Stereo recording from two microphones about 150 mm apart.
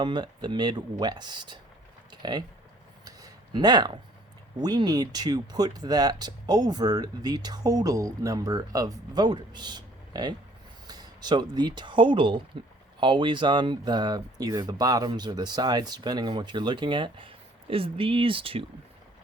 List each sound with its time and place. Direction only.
0.0 s speech: 30° right (ahead or behind)
3.0 s a sound: 25° right (ahead or behind)
4.5 s speech: 25° right (ahead or behind)